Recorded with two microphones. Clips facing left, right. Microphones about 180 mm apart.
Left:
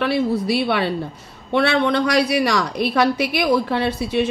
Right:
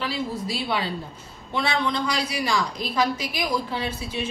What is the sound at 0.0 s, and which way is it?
Speech, 65° left (ahead or behind).